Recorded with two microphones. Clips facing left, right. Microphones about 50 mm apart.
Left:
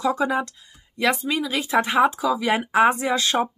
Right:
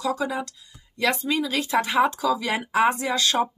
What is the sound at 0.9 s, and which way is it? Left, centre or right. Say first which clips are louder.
Speech: left 1 dB; centre.